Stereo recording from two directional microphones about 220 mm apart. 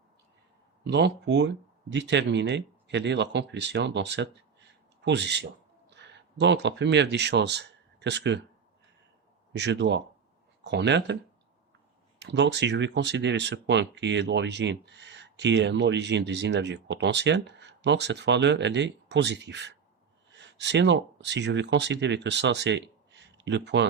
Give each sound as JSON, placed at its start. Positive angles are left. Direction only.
{"t": 0.9, "sound": "speech", "side_deg": -50}
{"t": 9.5, "sound": "speech", "side_deg": -50}
{"t": 12.2, "sound": "speech", "side_deg": -55}